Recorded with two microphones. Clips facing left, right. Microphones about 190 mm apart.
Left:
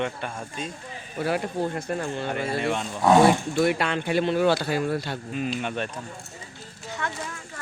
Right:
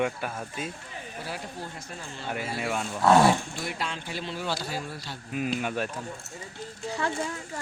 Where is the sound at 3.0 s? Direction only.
20° left (ahead or behind).